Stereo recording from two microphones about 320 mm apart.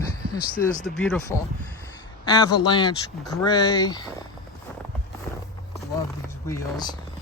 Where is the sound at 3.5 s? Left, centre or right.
Centre.